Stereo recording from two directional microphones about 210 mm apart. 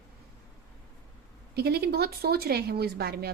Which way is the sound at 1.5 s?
50° right (ahead or behind).